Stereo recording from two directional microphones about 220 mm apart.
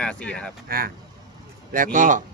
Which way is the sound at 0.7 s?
40° right (ahead or behind).